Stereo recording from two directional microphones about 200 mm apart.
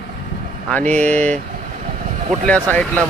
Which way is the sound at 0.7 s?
5° left (ahead or behind).